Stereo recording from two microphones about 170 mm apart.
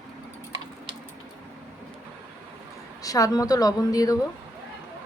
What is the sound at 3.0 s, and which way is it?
A woman's voice, 20° left (ahead or behind).